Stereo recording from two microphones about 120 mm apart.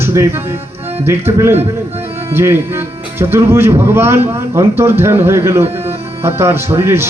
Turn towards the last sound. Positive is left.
turn(degrees=-20)  # may be behind; listen again after turning